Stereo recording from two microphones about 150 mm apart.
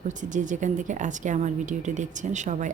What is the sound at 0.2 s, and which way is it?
A woman's voice, 55° right (ahead or behind).